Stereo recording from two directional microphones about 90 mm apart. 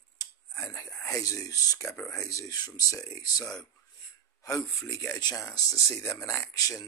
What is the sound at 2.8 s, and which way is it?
Speech, 40° left (ahead or behind).